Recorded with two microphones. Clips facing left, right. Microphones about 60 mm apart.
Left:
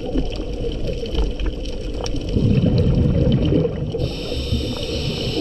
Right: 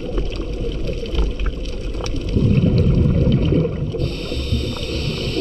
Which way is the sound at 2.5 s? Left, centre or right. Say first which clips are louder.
Right 1 dB; right.